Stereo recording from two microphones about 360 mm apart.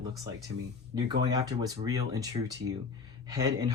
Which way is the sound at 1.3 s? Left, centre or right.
Centre.